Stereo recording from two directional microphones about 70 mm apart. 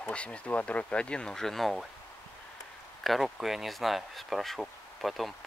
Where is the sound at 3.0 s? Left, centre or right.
Centre.